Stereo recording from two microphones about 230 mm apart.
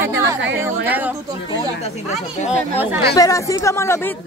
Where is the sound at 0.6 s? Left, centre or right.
Centre.